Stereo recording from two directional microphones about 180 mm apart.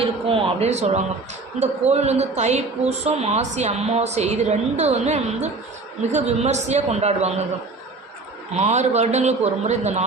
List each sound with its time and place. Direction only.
0.0 s a woman's voice: 30° right (ahead or behind)
8.5 s a woman's voice: 40° right (ahead or behind)